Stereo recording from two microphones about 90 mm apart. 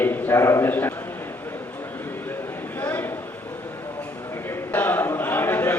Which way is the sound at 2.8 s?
20° left (ahead or behind).